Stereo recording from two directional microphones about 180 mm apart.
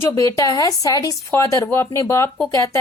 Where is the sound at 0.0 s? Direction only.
15° left (ahead or behind).